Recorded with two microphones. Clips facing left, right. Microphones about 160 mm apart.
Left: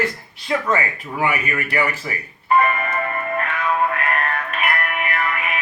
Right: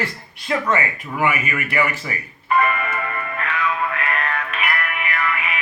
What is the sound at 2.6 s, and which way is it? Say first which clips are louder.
Music: left 1 dB; 40° left (ahead or behind).